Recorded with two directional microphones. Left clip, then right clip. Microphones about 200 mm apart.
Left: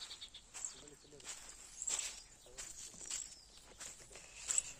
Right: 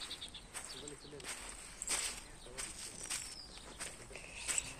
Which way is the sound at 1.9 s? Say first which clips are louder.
Right 4 dB; 5° right (ahead or behind).